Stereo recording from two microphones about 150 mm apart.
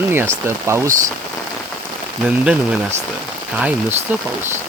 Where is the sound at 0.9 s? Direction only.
60° right (ahead or behind).